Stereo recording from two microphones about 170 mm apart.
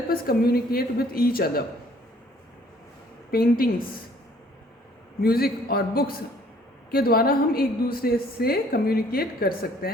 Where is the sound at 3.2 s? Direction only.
60° left (ahead or behind).